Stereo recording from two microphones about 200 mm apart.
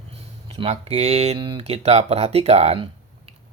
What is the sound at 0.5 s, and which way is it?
Speech, 30° right (ahead or behind).